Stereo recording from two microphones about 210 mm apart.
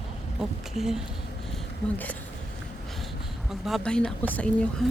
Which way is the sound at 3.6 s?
Centre (ahead or behind).